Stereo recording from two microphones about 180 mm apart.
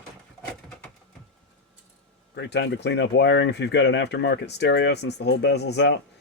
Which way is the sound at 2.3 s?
70° left (ahead or behind).